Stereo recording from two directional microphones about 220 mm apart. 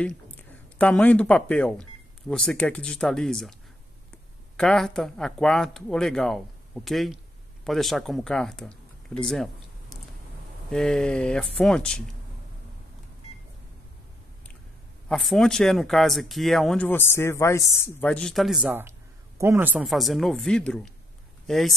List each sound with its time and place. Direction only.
0.0 s speech: 5° left (ahead or behind)
4.6 s speech: centre (ahead or behind)
10.7 s speech: 5° left (ahead or behind)
15.0 s speech: centre (ahead or behind)